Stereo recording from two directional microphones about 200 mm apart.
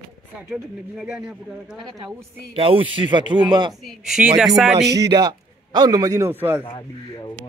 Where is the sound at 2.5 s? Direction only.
25° right (ahead or behind).